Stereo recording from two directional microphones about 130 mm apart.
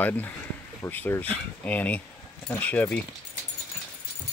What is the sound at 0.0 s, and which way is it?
Speech, 15° left (ahead or behind).